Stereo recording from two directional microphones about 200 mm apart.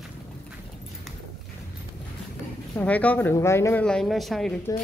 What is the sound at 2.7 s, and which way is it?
Speech, 10° left (ahead or behind).